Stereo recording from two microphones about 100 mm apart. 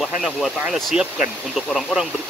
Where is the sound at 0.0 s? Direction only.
Centre (ahead or behind).